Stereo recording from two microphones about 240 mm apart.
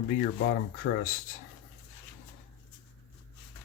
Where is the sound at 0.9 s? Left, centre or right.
Left.